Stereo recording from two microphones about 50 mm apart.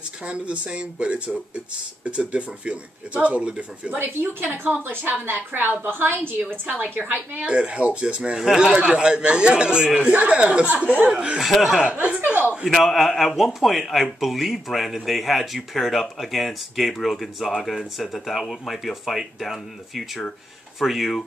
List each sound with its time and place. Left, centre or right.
0.2 s speech: right
4.0 s a woman's voice: right
7.4 s speech: right
11.3 s speech: centre
12.3 s speech: right
12.6 s speech: centre